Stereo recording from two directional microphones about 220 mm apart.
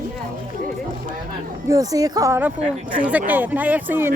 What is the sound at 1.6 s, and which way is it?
A woman's voice, 15° right (ahead or behind).